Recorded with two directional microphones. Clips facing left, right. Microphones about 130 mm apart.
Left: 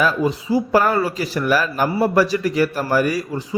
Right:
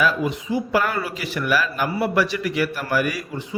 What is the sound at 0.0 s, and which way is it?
Speech, 35° left (ahead or behind).